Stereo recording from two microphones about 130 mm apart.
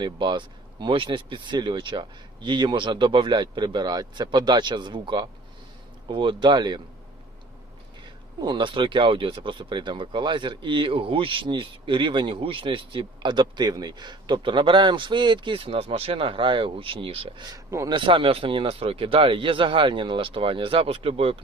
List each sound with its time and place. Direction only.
0.0 s speech: 35° right (ahead or behind)
8.4 s speech: 40° right (ahead or behind)
17.4 s speech: 25° right (ahead or behind)
17.9 s speech: 40° right (ahead or behind)